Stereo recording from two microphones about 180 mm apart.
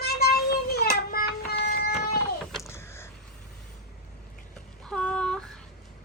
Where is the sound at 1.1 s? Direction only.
60° left (ahead or behind).